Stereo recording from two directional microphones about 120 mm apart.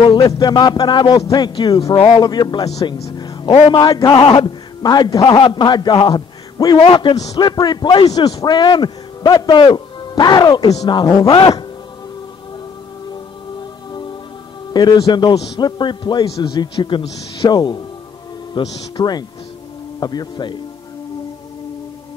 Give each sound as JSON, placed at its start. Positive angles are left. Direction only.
{"t": 0.1, "sound": "a man's voice", "side_deg": 35}
{"t": 2.0, "sound": "speech", "side_deg": 50}
{"t": 2.2, "sound": "a man's voice", "side_deg": 35}
{"t": 13.1, "sound": "music", "side_deg": 40}
{"t": 14.7, "sound": "a man's voice", "side_deg": 35}